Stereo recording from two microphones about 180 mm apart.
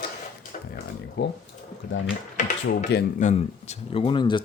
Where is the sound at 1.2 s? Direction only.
70° left (ahead or behind).